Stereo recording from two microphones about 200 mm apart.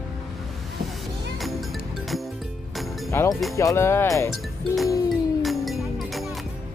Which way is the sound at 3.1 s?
10° left (ahead or behind).